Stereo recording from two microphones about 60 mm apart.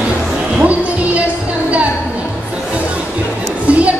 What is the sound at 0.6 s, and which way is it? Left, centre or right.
Music, right.